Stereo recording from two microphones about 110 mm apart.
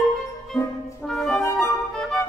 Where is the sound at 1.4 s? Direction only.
25° left (ahead or behind).